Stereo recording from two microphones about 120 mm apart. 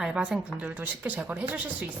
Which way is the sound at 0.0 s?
5° right (ahead or behind).